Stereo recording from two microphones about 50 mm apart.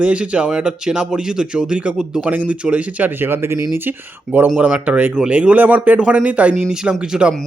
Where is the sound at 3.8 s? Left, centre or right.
Right.